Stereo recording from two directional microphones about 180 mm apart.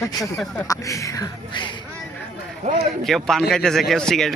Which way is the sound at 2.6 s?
35° right (ahead or behind).